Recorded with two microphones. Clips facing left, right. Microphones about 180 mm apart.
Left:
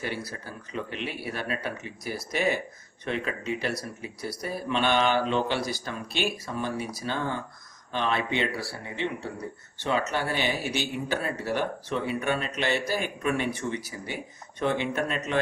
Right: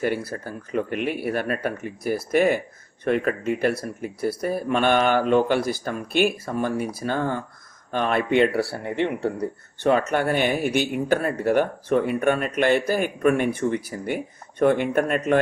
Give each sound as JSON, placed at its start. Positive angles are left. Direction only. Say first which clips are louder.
{"t": 0.0, "sound": "speech", "louder": "right 8 dB", "side_deg": -50}